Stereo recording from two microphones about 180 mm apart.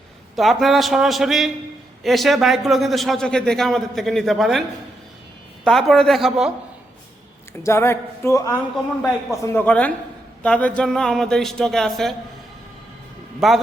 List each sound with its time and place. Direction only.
0.3 s a man's voice: centre (ahead or behind)
5.6 s a man's voice: centre (ahead or behind)
7.6 s a man's voice: 15° left (ahead or behind)
13.4 s a man's voice: centre (ahead or behind)